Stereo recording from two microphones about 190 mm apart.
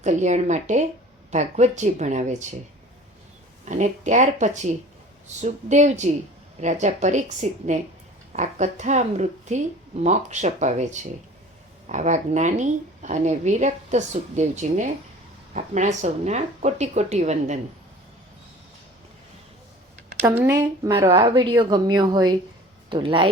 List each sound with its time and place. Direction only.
0.0 s speech: 40° right (ahead or behind)
3.7 s speech: 40° right (ahead or behind)
20.2 s a woman's voice: 15° right (ahead or behind)